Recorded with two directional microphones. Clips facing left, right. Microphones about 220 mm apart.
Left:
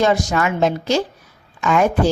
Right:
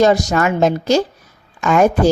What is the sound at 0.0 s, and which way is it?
A woman's voice, 40° right (ahead or behind).